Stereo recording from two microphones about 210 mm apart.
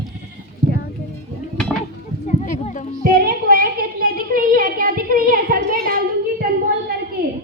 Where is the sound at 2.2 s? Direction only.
35° left (ahead or behind).